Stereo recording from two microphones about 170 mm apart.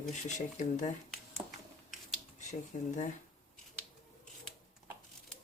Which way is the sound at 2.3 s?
45° left (ahead or behind).